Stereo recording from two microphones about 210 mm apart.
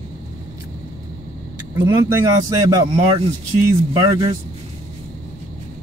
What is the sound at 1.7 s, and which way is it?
Speech, 20° right (ahead or behind).